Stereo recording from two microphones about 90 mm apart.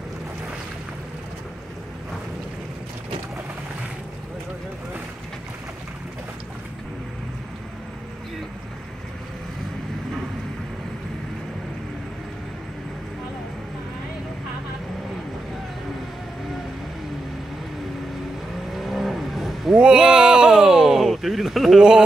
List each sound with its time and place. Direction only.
18.7 s vehicle: centre (ahead or behind)